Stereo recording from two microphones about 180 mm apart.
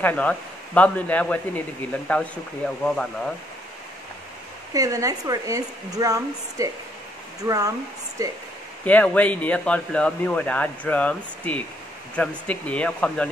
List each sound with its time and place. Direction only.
0.0 s speech: 10° left (ahead or behind)
4.7 s a woman's voice: 20° right (ahead or behind)
8.8 s speech: 10° left (ahead or behind)